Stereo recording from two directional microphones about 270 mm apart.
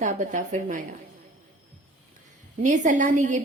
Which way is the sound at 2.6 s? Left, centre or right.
Right.